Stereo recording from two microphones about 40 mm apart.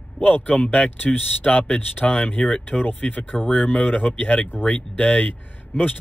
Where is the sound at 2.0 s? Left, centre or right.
Left.